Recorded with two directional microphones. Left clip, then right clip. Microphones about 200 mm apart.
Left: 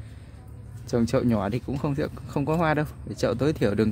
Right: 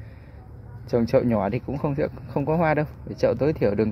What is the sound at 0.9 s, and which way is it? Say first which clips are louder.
Speech: right 4 dB; 15° left (ahead or behind).